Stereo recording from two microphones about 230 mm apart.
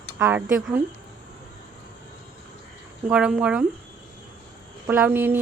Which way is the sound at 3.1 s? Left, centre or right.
Centre.